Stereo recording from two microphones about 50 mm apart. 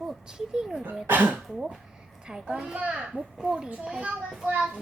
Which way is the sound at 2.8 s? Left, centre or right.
Right.